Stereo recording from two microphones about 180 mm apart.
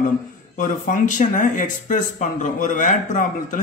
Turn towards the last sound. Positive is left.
turn(degrees=45)  # may be behind; listen again after turning